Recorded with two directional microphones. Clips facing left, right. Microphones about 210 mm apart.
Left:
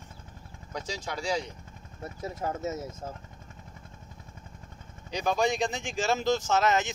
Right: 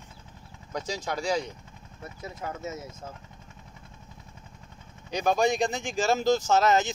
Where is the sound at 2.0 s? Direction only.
40° left (ahead or behind).